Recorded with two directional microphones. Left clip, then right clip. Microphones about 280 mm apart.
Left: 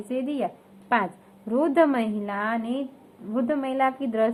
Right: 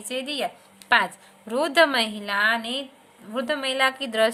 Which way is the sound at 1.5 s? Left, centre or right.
Right.